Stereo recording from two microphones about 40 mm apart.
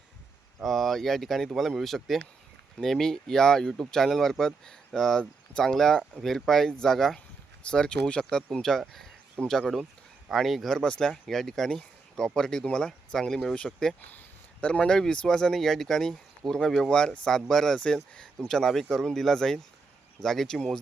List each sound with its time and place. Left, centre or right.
0.6 s speech: centre
7.6 s speech: left; by 10.8 s centre
10.8 s speech: left
11.3 s speech: centre
14.0 s speech: left
14.6 s speech: left; by 20.6 s centre